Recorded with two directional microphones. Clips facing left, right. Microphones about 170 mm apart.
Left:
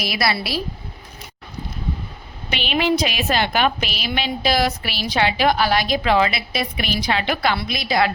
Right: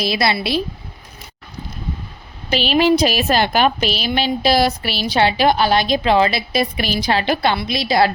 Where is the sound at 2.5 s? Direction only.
35° right (ahead or behind).